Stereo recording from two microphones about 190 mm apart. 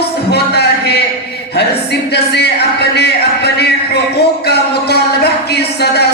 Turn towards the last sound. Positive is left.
turn(degrees=60)  # may be behind; listen again after turning